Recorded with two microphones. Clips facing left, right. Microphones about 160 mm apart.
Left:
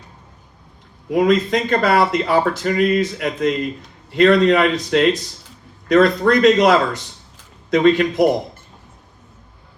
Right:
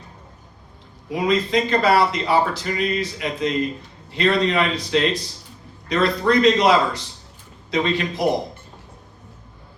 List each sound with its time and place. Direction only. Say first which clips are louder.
1.1 s speech: left 4 dB; 50° left (ahead or behind)